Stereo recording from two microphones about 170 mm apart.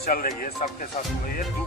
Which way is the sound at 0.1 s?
55° left (ahead or behind).